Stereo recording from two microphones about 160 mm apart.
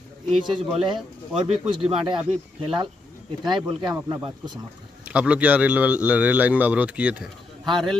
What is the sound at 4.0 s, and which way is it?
Speech, 15° right (ahead or behind).